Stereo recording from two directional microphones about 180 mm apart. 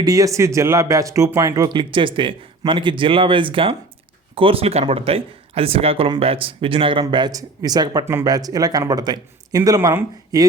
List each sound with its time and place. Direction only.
0.0 s speech: 20° right (ahead or behind)